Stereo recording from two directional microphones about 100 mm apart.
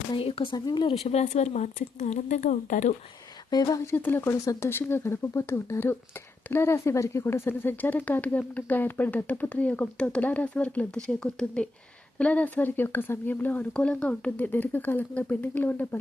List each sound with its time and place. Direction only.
0.1 s speech: 65° left (ahead or behind)
0.5 s speech: 45° left (ahead or behind)
1.0 s speech: 90° left
3.5 s speech: 35° left (ahead or behind)
3.9 s speech: 20° left (ahead or behind)